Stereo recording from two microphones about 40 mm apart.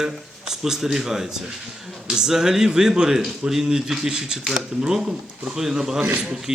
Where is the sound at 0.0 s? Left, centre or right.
Centre.